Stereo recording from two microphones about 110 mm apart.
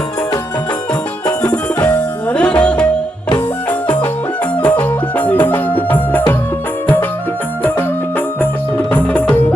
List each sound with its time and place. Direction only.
1.4 s music: 10° left (ahead or behind)
4.6 s music: 15° left (ahead or behind)
8.9 s music: 15° left (ahead or behind)